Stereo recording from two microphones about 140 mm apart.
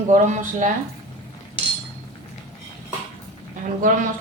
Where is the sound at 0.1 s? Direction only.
60° right (ahead or behind).